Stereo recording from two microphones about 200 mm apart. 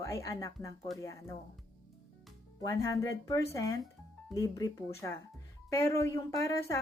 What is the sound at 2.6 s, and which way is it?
Speech, 15° left (ahead or behind).